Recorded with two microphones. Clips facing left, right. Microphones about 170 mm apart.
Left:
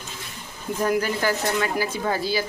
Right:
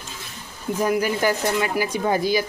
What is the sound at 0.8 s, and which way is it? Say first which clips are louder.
Speech: right 2 dB; 10° right (ahead or behind).